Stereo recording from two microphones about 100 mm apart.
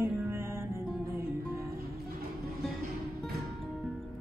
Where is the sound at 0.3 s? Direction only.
25° right (ahead or behind).